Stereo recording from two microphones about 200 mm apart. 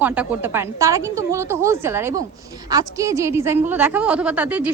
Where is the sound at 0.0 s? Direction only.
10° right (ahead or behind).